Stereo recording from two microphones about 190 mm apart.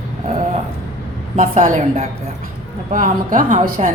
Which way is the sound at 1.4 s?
40° right (ahead or behind).